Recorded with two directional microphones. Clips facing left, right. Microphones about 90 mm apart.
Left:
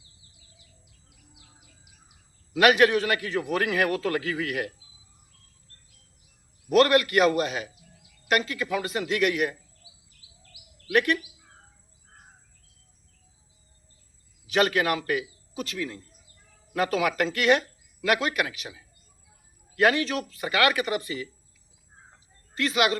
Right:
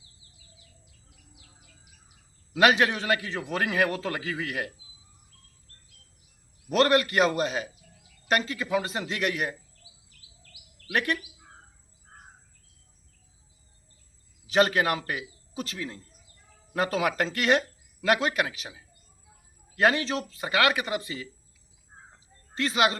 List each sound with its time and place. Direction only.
2.6 s a man's voice: 25° right (ahead or behind)
6.7 s a man's voice: 30° right (ahead or behind)
10.8 s a man's voice: 25° right (ahead or behind)
14.4 s a man's voice: 30° right (ahead or behind)
22.5 s a man's voice: 30° right (ahead or behind)